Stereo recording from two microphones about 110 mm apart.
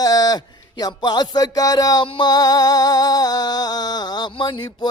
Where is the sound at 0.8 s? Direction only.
40° left (ahead or behind).